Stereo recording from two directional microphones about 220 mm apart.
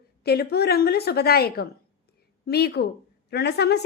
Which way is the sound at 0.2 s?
45° left (ahead or behind).